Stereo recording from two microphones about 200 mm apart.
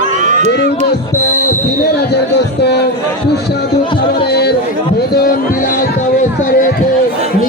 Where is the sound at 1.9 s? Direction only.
55° left (ahead or behind).